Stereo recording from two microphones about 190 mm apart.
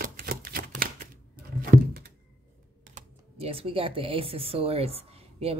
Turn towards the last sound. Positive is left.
turn(degrees=-30)  # may be behind; listen again after turning